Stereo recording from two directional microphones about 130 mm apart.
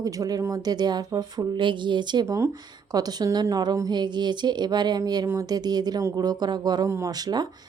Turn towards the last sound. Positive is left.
turn(degrees=-30)  # may be behind; listen again after turning